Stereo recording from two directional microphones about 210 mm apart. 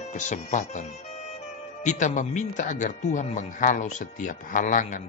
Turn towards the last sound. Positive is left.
turn(degrees=35)  # may be behind; listen again after turning